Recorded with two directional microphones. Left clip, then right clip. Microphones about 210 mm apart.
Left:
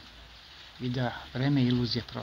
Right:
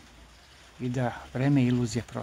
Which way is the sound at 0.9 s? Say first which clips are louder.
Right 2 dB; 10° right (ahead or behind).